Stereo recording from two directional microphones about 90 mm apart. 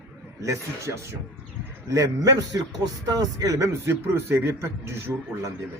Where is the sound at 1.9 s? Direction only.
40° right (ahead or behind).